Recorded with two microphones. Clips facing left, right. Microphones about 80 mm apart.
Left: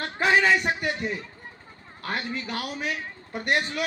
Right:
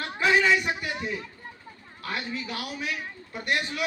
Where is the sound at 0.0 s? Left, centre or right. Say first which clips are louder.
Left 1 dB; left.